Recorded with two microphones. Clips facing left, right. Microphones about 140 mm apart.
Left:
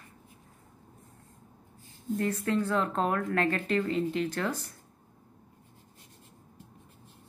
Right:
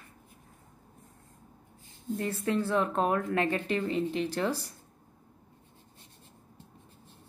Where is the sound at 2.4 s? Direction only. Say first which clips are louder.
Right 3 dB; 5° right (ahead or behind).